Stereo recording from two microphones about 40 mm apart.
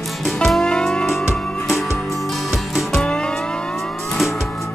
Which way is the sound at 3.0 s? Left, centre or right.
Left.